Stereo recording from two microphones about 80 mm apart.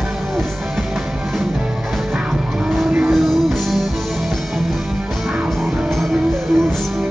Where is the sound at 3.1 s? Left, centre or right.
Centre.